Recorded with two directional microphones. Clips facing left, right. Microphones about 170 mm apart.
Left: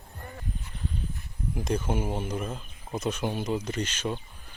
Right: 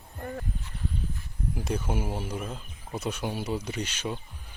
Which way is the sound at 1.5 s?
10° right (ahead or behind).